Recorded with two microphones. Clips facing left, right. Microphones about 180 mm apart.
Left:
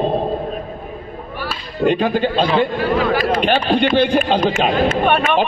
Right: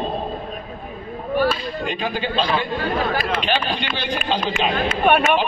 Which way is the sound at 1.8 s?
60° left (ahead or behind).